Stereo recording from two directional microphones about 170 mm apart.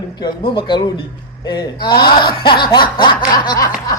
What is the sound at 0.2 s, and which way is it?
Speech, 25° left (ahead or behind).